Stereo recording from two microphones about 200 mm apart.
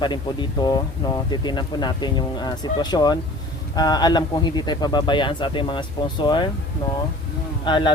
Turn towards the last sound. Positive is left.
turn(degrees=20)  # may be behind; listen again after turning